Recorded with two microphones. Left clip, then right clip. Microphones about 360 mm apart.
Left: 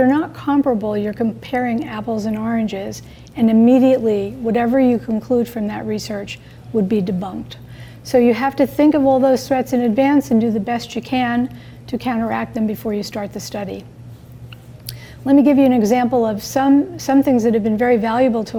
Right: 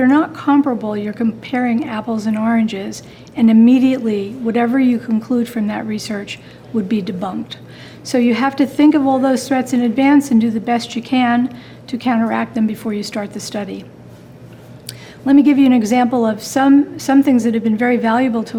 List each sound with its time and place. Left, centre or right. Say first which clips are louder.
0.0 s a woman's voice: right 2 dB; left
14.8 s a woman's voice: right 1 dB; left